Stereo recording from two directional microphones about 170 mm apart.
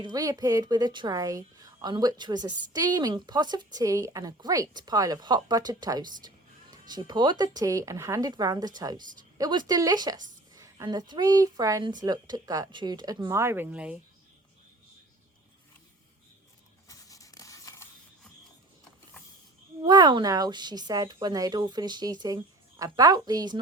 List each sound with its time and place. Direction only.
0.0 s a woman's voice: 20° right (ahead or behind)
16.9 s a sound: 20° left (ahead or behind)
19.8 s a woman's voice: 25° right (ahead or behind)